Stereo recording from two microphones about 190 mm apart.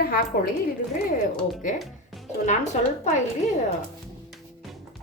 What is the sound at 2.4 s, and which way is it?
Speech, 40° left (ahead or behind).